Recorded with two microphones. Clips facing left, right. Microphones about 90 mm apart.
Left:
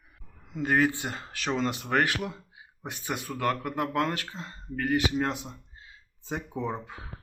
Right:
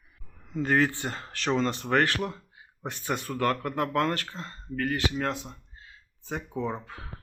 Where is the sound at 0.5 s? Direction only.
10° left (ahead or behind).